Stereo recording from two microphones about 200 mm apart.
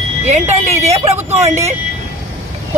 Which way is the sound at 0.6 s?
30° right (ahead or behind).